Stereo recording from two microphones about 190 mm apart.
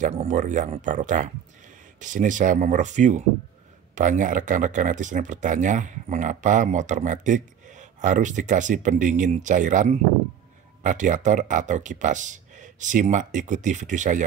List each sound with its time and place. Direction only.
0.0 s speech: 35° right (ahead or behind)